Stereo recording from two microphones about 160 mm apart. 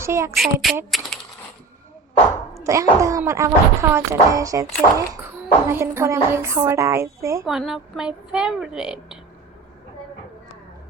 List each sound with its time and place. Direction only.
0.0 s a woman's voice: 15° right (ahead or behind)
0.3 s a woman's voice: centre (ahead or behind)
0.9 s typewriter: centre (ahead or behind)
2.7 s a woman's voice: 20° right (ahead or behind)
7.4 s a woman's voice: centre (ahead or behind)